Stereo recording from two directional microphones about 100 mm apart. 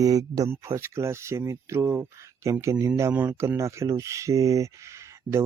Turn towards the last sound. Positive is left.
turn(degrees=-30)  # may be behind; listen again after turning